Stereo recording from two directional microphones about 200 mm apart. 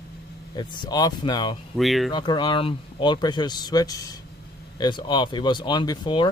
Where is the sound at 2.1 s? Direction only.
20° left (ahead or behind).